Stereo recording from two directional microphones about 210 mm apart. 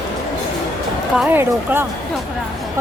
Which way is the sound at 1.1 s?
10° right (ahead or behind).